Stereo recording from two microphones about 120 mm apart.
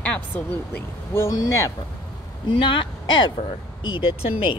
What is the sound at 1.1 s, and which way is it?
Speech, 25° left (ahead or behind).